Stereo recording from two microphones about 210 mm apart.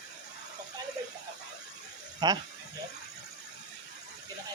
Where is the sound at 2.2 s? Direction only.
20° right (ahead or behind).